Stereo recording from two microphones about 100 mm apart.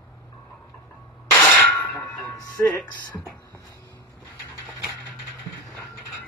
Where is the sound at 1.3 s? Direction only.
15° left (ahead or behind).